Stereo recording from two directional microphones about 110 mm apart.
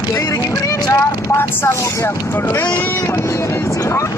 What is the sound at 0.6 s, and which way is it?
Speech, 25° left (ahead or behind).